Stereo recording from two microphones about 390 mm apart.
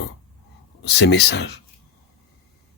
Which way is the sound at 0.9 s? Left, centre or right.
Left.